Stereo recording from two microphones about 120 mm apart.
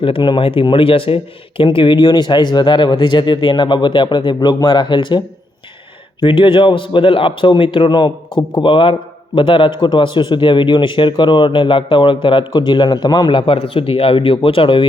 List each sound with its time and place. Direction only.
0.0 s speech: 45° left (ahead or behind)
6.2 s a man's voice: 45° left (ahead or behind)